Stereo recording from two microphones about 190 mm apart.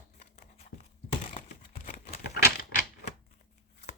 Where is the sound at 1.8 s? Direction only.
55° left (ahead or behind).